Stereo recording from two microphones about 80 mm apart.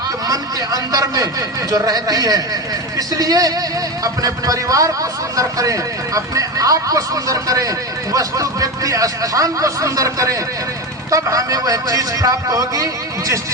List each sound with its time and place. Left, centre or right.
0.3 s a man's voice: right